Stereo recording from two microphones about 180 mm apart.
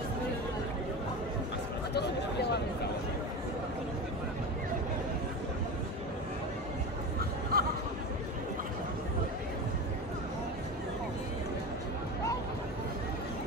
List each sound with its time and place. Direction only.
7.5 s chatter: 55° right (ahead or behind)